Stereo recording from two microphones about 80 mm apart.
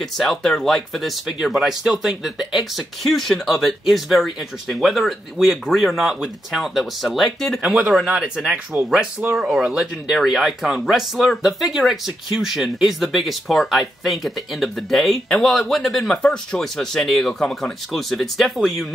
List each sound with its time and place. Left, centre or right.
0.3 s speech: centre
7.6 s speech: centre
8.7 s speech: right
9.4 s speech: centre